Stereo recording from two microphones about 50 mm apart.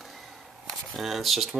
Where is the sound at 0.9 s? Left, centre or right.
Centre.